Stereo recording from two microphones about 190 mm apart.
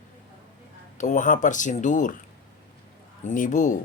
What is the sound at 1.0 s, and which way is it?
Speech, 40° left (ahead or behind).